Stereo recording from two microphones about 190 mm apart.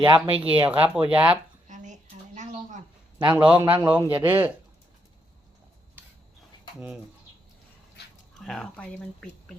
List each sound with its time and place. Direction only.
0.0 s speech: 25° right (ahead or behind)
0.5 s a man's voice: 10° right (ahead or behind)
1.6 s a sound: 40° right (ahead or behind)
3.2 s a man's voice: 10° right (ahead or behind)
6.7 s speech: 5° right (ahead or behind)
8.4 s speech: 5° left (ahead or behind)